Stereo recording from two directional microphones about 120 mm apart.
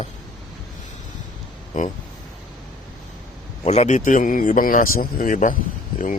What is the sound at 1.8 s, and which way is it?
Speech, 90° left.